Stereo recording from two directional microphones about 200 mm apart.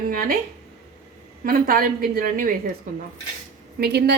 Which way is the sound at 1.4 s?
45° right (ahead or behind).